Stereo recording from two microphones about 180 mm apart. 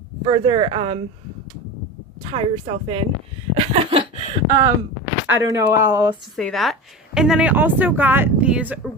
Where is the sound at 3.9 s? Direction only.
30° right (ahead or behind).